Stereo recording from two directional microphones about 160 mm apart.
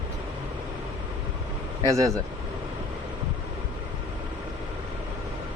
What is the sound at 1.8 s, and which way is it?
Speech, 20° right (ahead or behind).